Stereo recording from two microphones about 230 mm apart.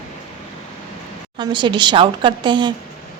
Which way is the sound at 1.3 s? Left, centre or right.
Right.